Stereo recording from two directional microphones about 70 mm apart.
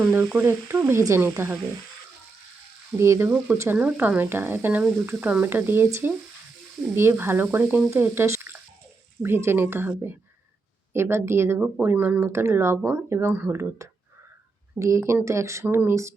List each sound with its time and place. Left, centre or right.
0.2 s speech: right
3.0 s speech: right
3.2 s speech: right
12.3 s speech: right
15.6 s speech: right